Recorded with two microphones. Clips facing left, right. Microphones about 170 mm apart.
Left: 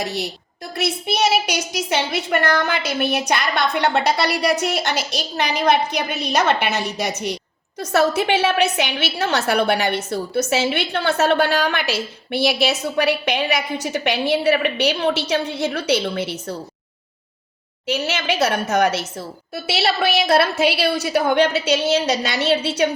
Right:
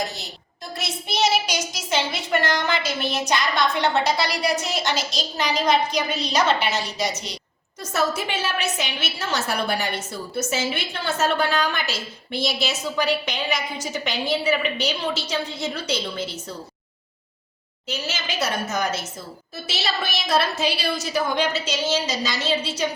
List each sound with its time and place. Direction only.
0.8 s a woman's voice: 60° left (ahead or behind)
17.8 s a woman's voice: 70° left (ahead or behind)